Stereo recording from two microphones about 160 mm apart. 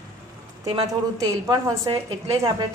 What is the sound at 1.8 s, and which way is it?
Speech, 35° right (ahead or behind).